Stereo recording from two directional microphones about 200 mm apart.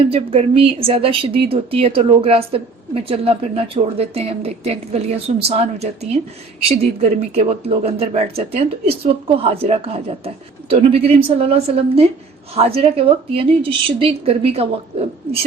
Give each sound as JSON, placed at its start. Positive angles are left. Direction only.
{"t": 0.1, "sound": "speech", "side_deg": -30}
{"t": 7.2, "sound": "speech", "side_deg": -30}